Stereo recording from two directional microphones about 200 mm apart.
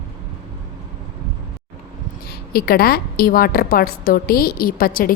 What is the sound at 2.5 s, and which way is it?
A woman's voice, 50° left (ahead or behind).